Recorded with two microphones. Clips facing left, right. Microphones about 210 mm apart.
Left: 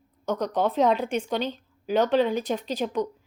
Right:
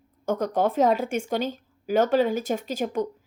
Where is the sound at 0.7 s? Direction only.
45° right (ahead or behind).